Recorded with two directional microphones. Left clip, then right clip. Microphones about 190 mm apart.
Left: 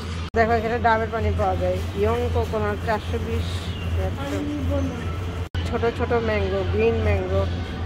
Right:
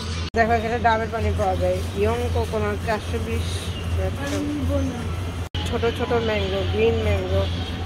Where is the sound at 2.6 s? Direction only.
Centre (ahead or behind).